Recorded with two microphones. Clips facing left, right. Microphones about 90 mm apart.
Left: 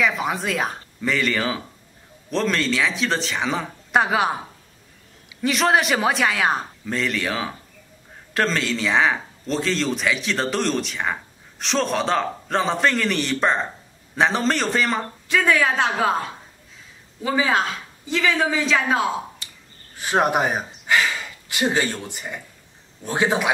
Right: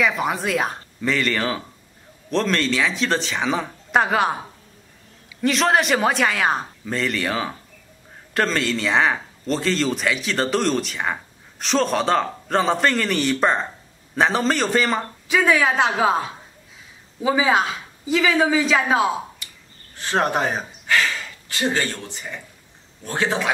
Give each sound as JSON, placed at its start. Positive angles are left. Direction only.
{"t": 0.0, "sound": "a man's voice", "side_deg": 0}
{"t": 5.4, "sound": "a man's voice", "side_deg": 0}
{"t": 20.0, "sound": "a sound", "side_deg": 10}
{"t": 22.0, "sound": "speech", "side_deg": 15}